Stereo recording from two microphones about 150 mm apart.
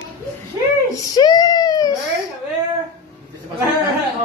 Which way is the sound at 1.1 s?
25° left (ahead or behind).